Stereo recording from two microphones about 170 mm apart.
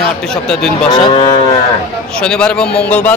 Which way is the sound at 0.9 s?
30° left (ahead or behind).